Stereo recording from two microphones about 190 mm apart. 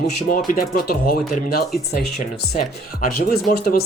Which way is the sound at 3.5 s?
55° left (ahead or behind).